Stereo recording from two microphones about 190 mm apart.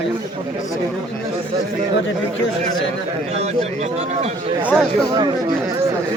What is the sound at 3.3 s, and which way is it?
A man's voice, 35° right (ahead or behind).